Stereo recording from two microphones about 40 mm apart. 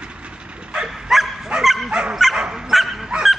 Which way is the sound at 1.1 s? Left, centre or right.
Centre.